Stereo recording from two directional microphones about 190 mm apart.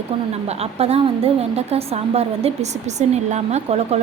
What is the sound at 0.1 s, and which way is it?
A woman's voice, 30° right (ahead or behind).